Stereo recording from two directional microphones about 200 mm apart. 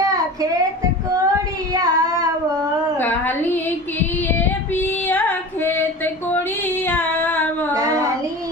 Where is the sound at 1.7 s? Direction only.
20° right (ahead or behind).